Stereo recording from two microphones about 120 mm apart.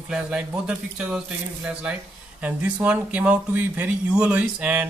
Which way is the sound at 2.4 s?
10° right (ahead or behind).